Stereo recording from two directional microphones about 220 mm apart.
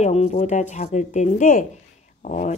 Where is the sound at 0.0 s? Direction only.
30° left (ahead or behind).